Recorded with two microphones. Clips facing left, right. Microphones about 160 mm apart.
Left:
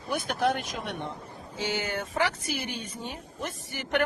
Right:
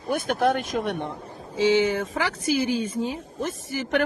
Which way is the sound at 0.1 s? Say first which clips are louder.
Right 5 dB; 50° right (ahead or behind).